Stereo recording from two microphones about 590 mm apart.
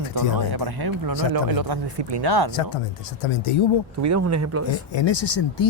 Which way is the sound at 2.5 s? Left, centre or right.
Left.